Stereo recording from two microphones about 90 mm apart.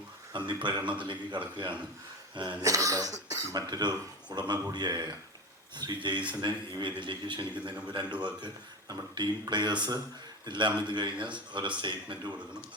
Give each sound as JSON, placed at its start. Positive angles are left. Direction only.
{"t": 0.3, "sound": "a man's voice", "side_deg": -60}
{"t": 2.6, "sound": "a man's voice", "side_deg": -40}